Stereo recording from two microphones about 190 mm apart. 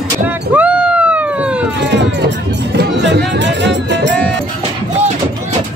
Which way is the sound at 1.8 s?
65° right (ahead or behind).